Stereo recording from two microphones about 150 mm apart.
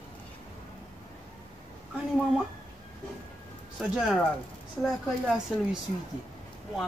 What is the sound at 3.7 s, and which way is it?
Music, 5° right (ahead or behind).